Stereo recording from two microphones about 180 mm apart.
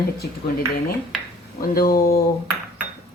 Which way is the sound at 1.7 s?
55° left (ahead or behind).